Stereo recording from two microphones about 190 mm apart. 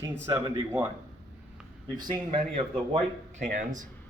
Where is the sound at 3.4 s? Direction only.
40° right (ahead or behind).